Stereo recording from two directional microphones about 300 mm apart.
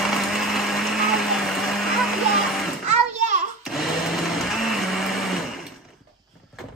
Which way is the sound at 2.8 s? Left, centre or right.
Right.